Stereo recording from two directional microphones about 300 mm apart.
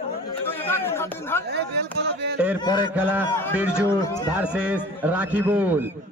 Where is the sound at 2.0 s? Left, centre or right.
Right.